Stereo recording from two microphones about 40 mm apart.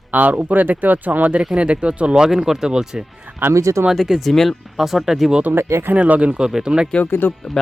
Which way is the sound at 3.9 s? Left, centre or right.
Centre.